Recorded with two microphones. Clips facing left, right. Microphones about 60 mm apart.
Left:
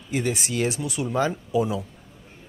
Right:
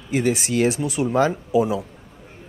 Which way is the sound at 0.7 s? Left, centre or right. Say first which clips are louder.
Right 6 dB; right.